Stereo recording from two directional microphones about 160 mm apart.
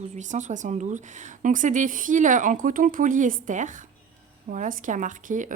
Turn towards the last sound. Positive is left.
turn(degrees=-55)  # may be behind; listen again after turning